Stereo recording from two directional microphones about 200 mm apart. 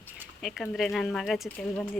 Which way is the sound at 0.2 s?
Centre (ahead or behind).